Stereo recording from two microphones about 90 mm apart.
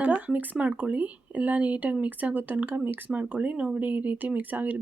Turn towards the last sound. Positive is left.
turn(degrees=-20)  # may be behind; listen again after turning